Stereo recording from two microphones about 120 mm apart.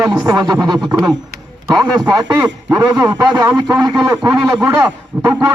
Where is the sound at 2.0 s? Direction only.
35° right (ahead or behind).